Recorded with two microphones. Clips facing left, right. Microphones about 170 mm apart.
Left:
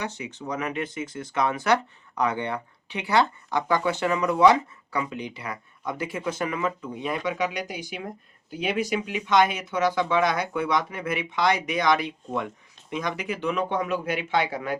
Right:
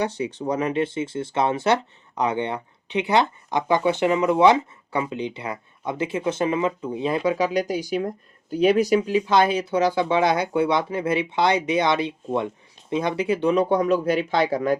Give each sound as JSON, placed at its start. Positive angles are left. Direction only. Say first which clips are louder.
{"t": 0.0, "sound": "speech", "louder": "right 8 dB", "side_deg": -30}